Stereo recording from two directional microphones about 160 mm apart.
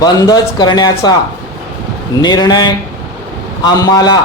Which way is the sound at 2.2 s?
25° left (ahead or behind).